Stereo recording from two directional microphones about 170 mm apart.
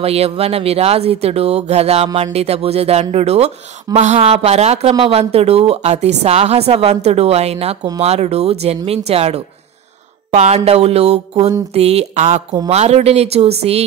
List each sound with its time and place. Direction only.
0.0 s a woman's voice: 35° right (ahead or behind)